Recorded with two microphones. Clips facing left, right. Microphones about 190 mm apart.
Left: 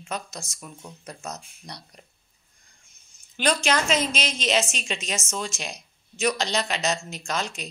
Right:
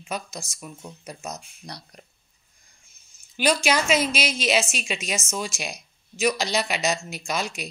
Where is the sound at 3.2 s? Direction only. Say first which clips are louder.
Right 2 dB; 10° right (ahead or behind).